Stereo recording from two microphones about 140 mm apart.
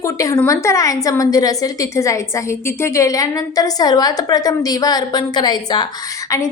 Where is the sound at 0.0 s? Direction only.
20° left (ahead or behind).